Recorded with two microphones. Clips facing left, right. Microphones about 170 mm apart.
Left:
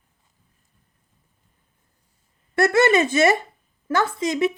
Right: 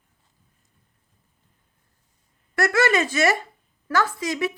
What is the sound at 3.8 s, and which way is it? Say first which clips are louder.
Speech: left 2 dB; 25° left (ahead or behind).